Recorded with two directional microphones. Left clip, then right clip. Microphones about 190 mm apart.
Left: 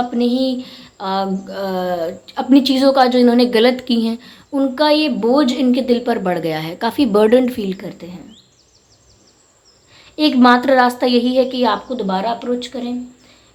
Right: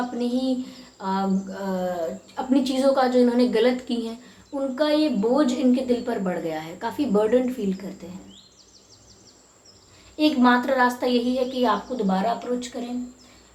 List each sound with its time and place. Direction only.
0.2 s a woman's voice: 55° left (ahead or behind)
10.2 s a woman's voice: 50° left (ahead or behind)